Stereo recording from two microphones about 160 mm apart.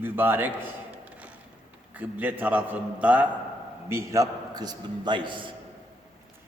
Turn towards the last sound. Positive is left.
turn(degrees=-30)  # may be behind; listen again after turning